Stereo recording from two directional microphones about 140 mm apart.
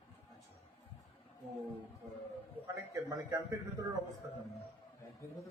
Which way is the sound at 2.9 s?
25° right (ahead or behind).